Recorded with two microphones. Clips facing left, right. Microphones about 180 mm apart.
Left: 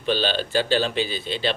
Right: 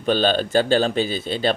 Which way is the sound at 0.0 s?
45° right (ahead or behind).